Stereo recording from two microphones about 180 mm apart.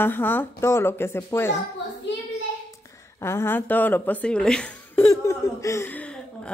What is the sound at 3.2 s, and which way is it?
A woman's voice, 15° left (ahead or behind).